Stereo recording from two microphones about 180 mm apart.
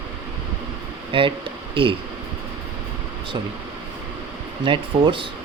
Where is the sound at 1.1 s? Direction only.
30° right (ahead or behind).